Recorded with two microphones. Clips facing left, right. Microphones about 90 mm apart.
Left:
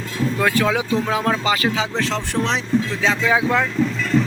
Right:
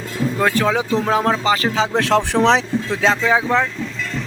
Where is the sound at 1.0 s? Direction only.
35° right (ahead or behind).